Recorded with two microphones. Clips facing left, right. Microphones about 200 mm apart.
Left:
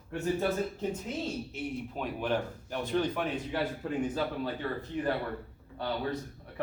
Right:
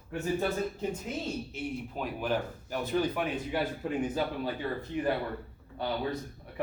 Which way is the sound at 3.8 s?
15° right (ahead or behind).